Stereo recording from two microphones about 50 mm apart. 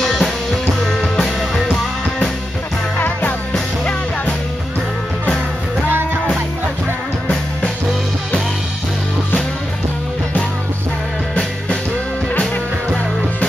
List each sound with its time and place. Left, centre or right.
0.0 s music: centre
3.0 s music: left
3.5 s music: left